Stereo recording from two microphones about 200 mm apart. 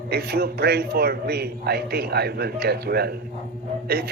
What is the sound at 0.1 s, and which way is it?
A man's voice, 50° right (ahead or behind).